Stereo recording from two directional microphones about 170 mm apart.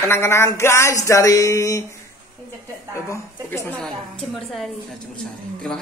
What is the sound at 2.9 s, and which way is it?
A woman's voice, 15° left (ahead or behind).